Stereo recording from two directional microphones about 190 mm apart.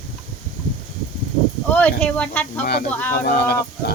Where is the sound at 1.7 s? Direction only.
10° left (ahead or behind).